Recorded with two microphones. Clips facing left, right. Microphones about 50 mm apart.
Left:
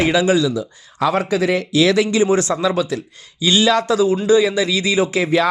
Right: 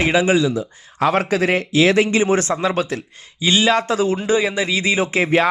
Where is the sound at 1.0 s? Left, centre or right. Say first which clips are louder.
Even; right.